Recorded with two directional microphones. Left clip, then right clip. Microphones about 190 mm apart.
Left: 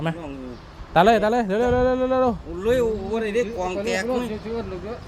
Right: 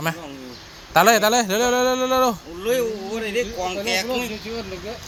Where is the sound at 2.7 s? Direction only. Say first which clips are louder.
Left 1 dB; 45° left (ahead or behind).